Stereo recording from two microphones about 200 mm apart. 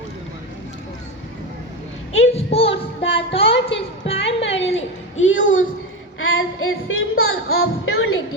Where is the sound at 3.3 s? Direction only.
30° left (ahead or behind).